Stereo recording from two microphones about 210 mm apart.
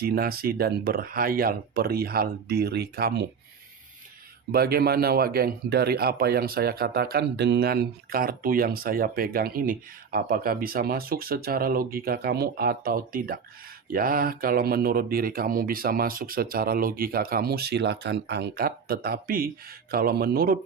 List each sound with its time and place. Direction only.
0.0 s a man's voice: 45° right (ahead or behind)
4.5 s a man's voice: 45° right (ahead or behind)